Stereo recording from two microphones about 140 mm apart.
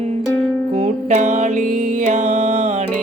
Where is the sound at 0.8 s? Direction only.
55° right (ahead or behind).